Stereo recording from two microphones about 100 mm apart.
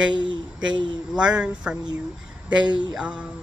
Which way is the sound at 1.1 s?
10° right (ahead or behind).